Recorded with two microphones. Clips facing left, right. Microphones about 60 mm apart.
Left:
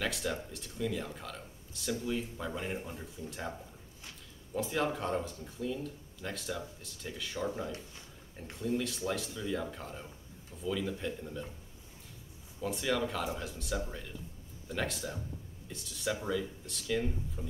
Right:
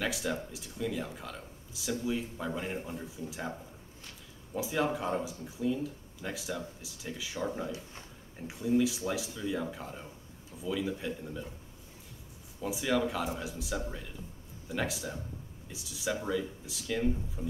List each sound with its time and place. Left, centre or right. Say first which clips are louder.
0.0 s speech: right 2 dB; centre
4.6 s speech: right 1 dB; centre
12.5 s speech: right 2 dB; centre